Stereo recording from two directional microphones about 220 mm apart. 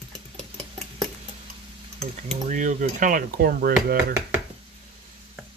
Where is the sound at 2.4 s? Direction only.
35° right (ahead or behind).